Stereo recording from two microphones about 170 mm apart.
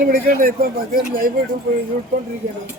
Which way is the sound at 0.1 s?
55° right (ahead or behind).